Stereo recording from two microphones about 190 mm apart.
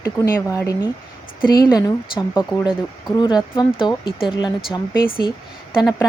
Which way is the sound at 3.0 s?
20° left (ahead or behind).